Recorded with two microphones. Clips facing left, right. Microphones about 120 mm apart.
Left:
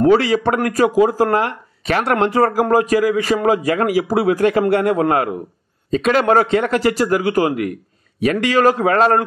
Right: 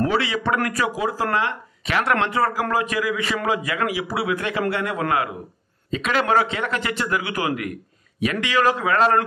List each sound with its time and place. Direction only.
0.0 s a man's voice: 40° left (ahead or behind)